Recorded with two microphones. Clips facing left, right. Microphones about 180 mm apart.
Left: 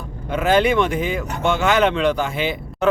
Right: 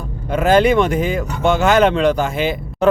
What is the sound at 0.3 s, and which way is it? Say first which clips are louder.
Speech: right 4 dB; 40° right (ahead or behind).